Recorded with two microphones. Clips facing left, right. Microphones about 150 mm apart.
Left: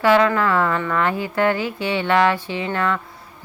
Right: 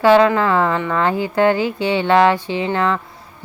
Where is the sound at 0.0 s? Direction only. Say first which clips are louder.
Right 4 dB; 30° right (ahead or behind).